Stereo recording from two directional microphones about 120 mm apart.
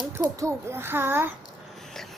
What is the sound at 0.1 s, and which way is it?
A child's voice, 25° right (ahead or behind).